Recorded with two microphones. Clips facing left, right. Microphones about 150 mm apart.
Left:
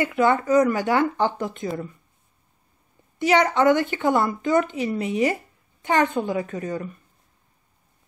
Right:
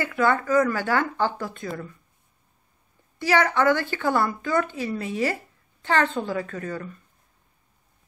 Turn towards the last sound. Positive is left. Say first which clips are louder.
# left 3 dB
turn(degrees=20)  # may be behind; listen again after turning